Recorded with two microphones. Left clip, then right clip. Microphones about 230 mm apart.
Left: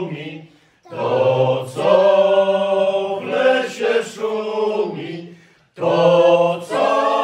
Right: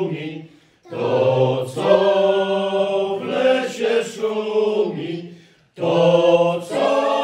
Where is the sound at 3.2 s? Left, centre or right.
Centre.